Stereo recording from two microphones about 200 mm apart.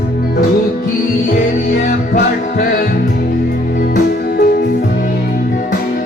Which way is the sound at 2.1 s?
45° left (ahead or behind).